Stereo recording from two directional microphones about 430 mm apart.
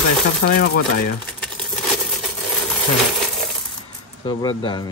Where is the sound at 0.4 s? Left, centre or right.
Left.